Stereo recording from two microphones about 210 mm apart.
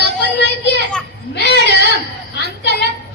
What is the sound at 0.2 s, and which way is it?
Children playing, 55° left (ahead or behind).